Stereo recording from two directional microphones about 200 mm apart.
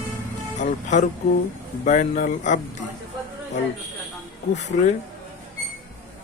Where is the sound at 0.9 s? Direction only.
35° left (ahead or behind).